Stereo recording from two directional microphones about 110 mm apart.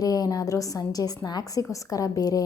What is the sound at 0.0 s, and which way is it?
A woman's voice, 35° left (ahead or behind).